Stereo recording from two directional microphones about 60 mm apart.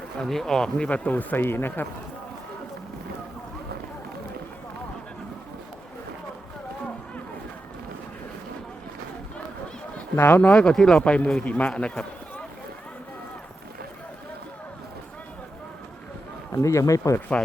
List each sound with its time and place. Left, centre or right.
0.2 s speech: centre
0.9 s speech: left
10.2 s speech: left
10.4 s a man's voice: centre
11.7 s run: centre
16.5 s speech: left